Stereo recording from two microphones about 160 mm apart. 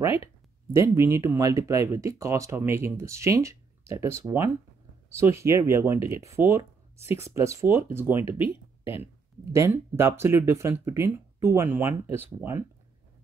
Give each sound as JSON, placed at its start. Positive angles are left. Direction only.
{"t": 0.0, "sound": "speech", "side_deg": 35}
{"t": 0.7, "sound": "speech", "side_deg": -15}
{"t": 8.3, "sound": "speech", "side_deg": 35}
{"t": 9.4, "sound": "speech", "side_deg": -15}